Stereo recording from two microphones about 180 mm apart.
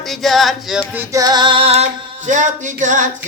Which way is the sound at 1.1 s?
20° right (ahead or behind).